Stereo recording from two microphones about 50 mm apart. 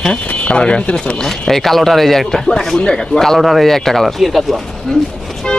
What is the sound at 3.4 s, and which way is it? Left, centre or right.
Speech, centre.